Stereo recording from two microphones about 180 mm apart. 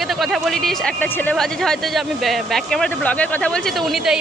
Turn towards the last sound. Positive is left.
turn(degrees=0)  # may be behind; listen again after turning